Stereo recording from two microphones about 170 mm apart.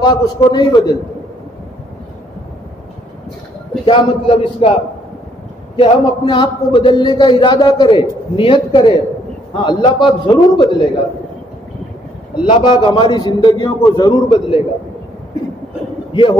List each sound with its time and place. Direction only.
0.0 s a man's voice: 25° left (ahead or behind)
3.8 s a man's voice: 30° left (ahead or behind)
5.8 s a man's voice: 30° left (ahead or behind)
12.4 s a man's voice: 30° left (ahead or behind)
16.1 s a man's voice: 30° left (ahead or behind)